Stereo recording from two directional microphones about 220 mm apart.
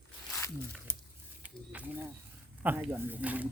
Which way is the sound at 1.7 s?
5° right (ahead or behind).